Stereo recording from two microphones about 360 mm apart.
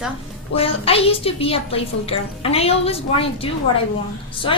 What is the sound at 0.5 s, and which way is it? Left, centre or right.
A woman's voice, centre.